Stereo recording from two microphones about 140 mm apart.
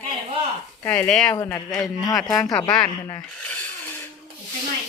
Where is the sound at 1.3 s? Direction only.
25° left (ahead or behind).